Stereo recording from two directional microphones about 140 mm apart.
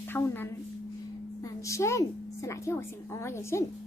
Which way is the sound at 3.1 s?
20° left (ahead or behind).